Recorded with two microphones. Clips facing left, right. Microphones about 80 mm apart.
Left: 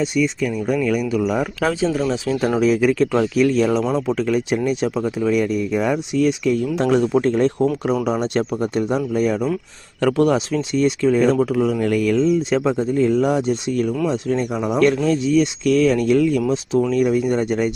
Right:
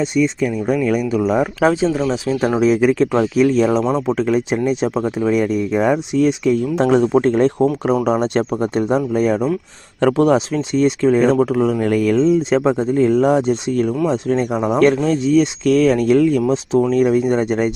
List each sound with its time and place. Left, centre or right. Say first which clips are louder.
0.0 s speech: right 3 dB; right